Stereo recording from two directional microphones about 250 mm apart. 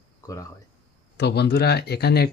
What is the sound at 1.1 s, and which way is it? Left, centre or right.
Speech, left.